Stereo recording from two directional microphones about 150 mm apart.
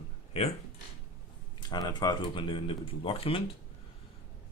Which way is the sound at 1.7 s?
30° left (ahead or behind).